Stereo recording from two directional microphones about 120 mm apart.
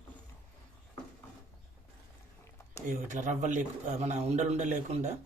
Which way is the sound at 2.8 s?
90° right.